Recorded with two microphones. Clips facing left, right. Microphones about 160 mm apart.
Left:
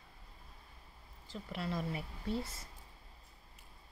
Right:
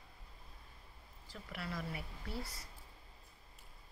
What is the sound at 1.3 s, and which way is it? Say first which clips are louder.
A woman's voice: left 5 dB; 25° left (ahead or behind).